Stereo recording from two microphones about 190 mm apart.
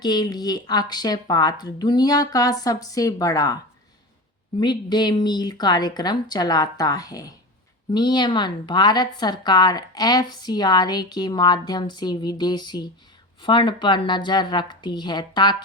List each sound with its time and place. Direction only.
0.0 s a woman's voice: 20° left (ahead or behind)
4.6 s a woman's voice: 20° left (ahead or behind)